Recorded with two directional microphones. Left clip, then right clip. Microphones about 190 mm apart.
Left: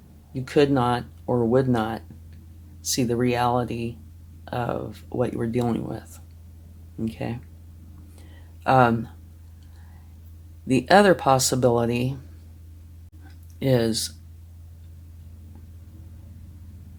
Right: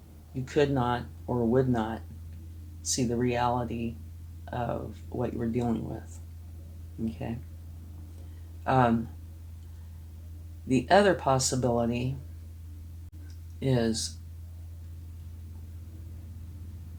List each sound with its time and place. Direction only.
0.4 s speech: 50° left (ahead or behind)
8.6 s speech: 50° left (ahead or behind)
10.7 s speech: 50° left (ahead or behind)
13.6 s speech: 50° left (ahead or behind)